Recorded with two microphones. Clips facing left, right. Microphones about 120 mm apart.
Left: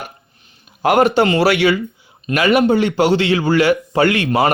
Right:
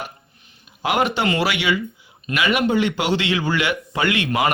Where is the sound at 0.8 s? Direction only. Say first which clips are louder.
Left 7 dB; 45° left (ahead or behind).